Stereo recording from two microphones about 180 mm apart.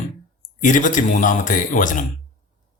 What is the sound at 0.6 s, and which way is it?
A man's voice, 45° left (ahead or behind).